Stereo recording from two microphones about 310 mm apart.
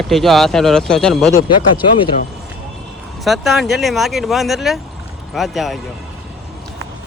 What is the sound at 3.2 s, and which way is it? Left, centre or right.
Speech, centre.